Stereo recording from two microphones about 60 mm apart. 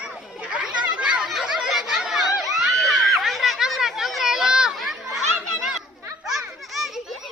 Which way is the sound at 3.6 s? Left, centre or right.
Centre.